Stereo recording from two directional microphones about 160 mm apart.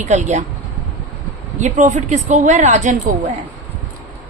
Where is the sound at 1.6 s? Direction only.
50° right (ahead or behind).